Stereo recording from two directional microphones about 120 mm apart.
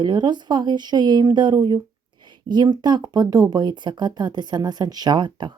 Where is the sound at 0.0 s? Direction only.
40° right (ahead or behind).